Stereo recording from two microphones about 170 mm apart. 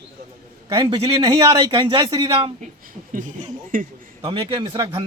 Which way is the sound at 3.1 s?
50° right (ahead or behind).